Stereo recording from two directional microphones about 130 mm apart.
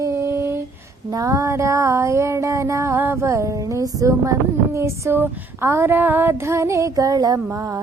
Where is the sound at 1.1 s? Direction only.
25° right (ahead or behind).